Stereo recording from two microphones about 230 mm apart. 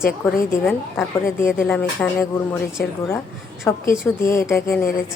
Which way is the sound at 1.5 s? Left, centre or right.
Centre.